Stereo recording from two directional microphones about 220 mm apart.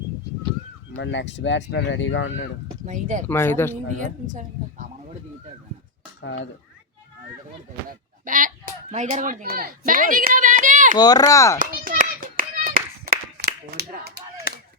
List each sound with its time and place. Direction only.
0.9 s speech: 55° left (ahead or behind)
2.8 s speech: 35° right (ahead or behind)
3.2 s speech: 10° left (ahead or behind)
4.0 s a sound: 35° right (ahead or behind)
6.2 s speech: 55° left (ahead or behind)
8.2 s speech: 40° right (ahead or behind)
10.9 s speech: 15° left (ahead or behind)
11.6 s children playing: 40° right (ahead or behind)
13.3 s a sound: 50° right (ahead or behind)
14.5 s a sound: 40° left (ahead or behind)